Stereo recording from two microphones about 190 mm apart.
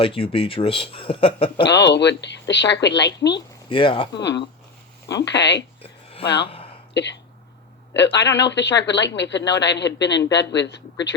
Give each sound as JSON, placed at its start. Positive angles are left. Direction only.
{"t": 0.0, "sound": "a man's voice", "side_deg": 30}
{"t": 1.6, "sound": "a woman's voice", "side_deg": 65}
{"t": 3.7, "sound": "a man's voice", "side_deg": 25}
{"t": 4.1, "sound": "a woman's voice", "side_deg": 65}
{"t": 5.8, "sound": "a sound", "side_deg": 30}
{"t": 6.2, "sound": "a woman's voice", "side_deg": 60}
{"t": 6.5, "sound": "a sound", "side_deg": 30}
{"t": 6.9, "sound": "a woman's voice", "side_deg": 65}